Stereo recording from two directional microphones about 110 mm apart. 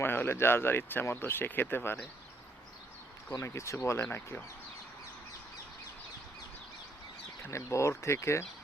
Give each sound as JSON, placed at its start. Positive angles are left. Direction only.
{"t": 0.0, "sound": "speech", "side_deg": 20}
{"t": 3.4, "sound": "speech", "side_deg": 25}
{"t": 7.4, "sound": "speech", "side_deg": 25}